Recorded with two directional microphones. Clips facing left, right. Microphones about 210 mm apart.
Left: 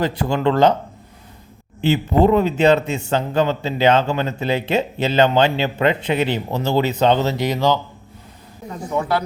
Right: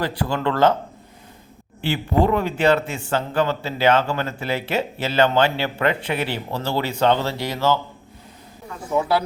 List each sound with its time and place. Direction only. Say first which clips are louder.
0.0 s speech: left 4 dB; 20° left (ahead or behind)
1.8 s speech: left 4 dB; 20° left (ahead or behind)
8.9 s speech: right 1 dB; 5° right (ahead or behind)